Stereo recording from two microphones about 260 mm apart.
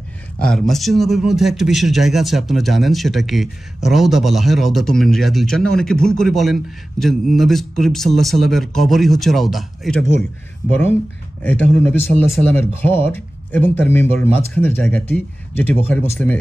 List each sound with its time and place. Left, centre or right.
0.4 s a man's voice: centre